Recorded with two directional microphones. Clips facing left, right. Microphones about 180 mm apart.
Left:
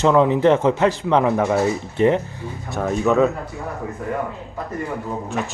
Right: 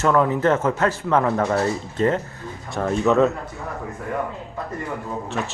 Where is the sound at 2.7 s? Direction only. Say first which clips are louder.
Even; centre (ahead or behind).